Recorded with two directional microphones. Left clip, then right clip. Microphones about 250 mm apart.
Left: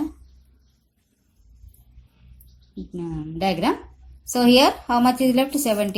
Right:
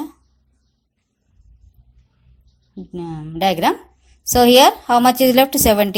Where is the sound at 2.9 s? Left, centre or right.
Right.